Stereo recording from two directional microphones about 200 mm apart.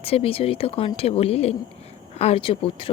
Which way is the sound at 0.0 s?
30° left (ahead or behind).